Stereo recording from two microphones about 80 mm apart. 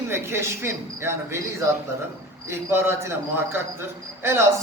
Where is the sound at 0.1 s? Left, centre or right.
Right.